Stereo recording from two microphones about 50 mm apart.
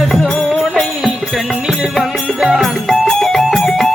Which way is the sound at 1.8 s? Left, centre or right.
Centre.